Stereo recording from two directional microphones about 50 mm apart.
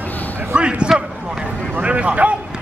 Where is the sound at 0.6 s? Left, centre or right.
Right.